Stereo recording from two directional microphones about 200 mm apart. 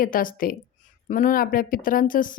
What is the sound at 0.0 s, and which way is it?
A woman's voice, 45° left (ahead or behind).